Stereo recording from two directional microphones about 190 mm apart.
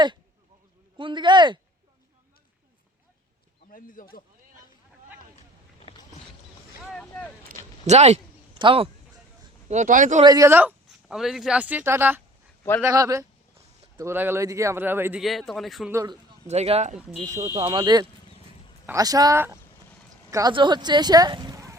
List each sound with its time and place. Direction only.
0.9 s speech: 25° right (ahead or behind)
3.7 s speech: 45° left (ahead or behind)
6.8 s boat: 5° left (ahead or behind)
7.4 s a sound: 40° right (ahead or behind)
9.6 s speech: 40° right (ahead or behind)
10.2 s speech: 15° right (ahead or behind)
15.2 s a man's voice: centre (ahead or behind)
15.9 s speech: 15° right (ahead or behind)
16.5 s speech: 35° right (ahead or behind); by 21.8 s 15° right (ahead or behind)